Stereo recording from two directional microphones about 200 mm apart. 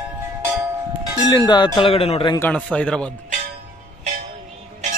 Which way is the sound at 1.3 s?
20° left (ahead or behind).